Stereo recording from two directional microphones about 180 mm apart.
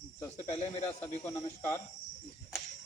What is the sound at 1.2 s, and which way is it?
Speech, 15° left (ahead or behind).